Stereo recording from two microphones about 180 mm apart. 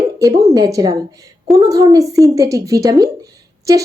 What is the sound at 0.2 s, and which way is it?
A woman's voice, 20° right (ahead or behind).